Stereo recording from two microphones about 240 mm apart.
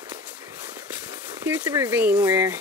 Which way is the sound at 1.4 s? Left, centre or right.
Centre.